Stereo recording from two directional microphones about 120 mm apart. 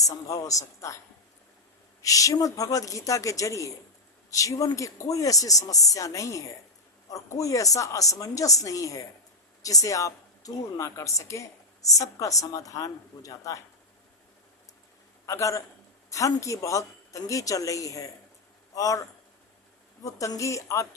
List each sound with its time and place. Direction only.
0.0 s a woman's voice: 30° left (ahead or behind)
15.3 s a woman's voice: 25° left (ahead or behind)
20.1 s a woman's voice: 30° left (ahead or behind)